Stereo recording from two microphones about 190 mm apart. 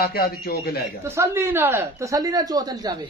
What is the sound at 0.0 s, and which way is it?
Speech, 50° left (ahead or behind).